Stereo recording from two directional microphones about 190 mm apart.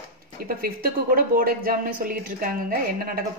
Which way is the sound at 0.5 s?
50° right (ahead or behind).